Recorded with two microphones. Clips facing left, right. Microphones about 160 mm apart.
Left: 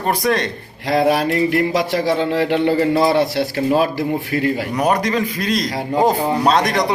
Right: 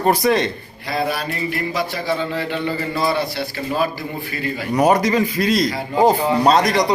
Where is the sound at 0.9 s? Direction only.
90° left.